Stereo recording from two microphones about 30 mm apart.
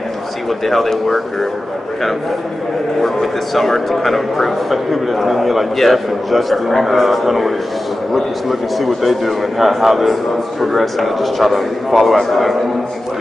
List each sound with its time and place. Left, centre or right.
0.7 s a man's voice: centre
3.0 s a man's voice: centre